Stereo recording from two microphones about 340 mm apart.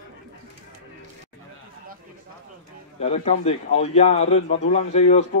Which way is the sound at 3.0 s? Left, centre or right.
Centre.